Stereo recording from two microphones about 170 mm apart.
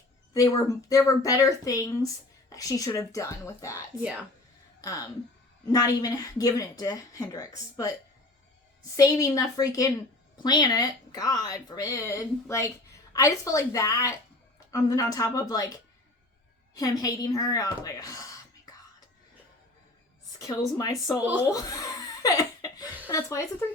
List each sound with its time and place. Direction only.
0.3 s a woman's voice: 20° left (ahead or behind)
20.4 s speech: 20° left (ahead or behind)
21.2 s speech: 10° right (ahead or behind)
21.5 s laughter: 20° left (ahead or behind)
23.0 s a woman's voice: 20° left (ahead or behind)